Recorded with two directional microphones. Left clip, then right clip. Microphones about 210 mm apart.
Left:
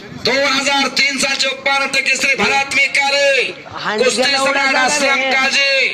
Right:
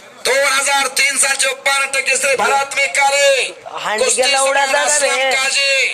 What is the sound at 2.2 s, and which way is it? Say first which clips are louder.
Speech: even; 10° left (ahead or behind).